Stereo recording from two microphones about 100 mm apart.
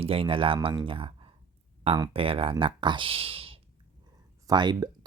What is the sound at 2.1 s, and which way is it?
Speech, 65° right (ahead or behind).